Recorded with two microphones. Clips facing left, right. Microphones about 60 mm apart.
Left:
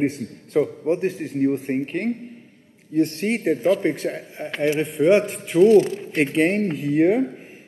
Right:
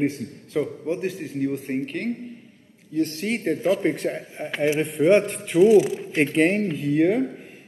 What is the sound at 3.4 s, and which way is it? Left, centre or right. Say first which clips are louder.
A man's voice: left 2 dB; centre.